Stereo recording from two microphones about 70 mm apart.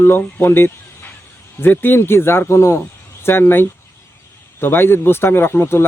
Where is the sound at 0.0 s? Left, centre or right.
Left.